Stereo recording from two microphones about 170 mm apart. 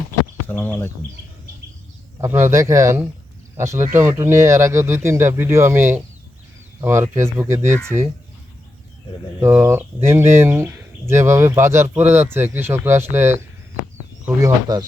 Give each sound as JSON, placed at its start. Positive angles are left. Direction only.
{"t": 0.4, "sound": "speech", "side_deg": 10}
{"t": 2.2, "sound": "speech", "side_deg": -15}
{"t": 9.4, "sound": "speech", "side_deg": -15}